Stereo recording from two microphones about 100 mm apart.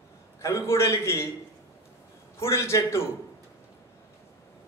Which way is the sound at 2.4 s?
30° left (ahead or behind).